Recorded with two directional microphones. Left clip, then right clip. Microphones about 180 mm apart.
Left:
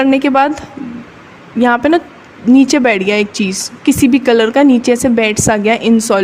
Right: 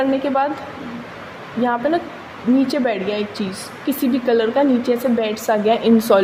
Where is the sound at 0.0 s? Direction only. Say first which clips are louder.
Left 7 dB; 45° left (ahead or behind).